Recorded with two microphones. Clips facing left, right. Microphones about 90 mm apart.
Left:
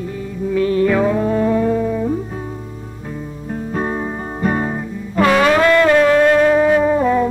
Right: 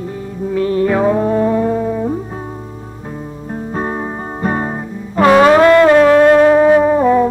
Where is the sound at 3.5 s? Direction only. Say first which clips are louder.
Right 1 dB; 30° right (ahead or behind).